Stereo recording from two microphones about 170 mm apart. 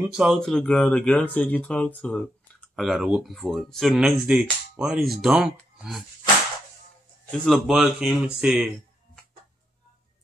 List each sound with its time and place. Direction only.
0.1 s speech: centre (ahead or behind)
7.2 s a man's voice: centre (ahead or behind)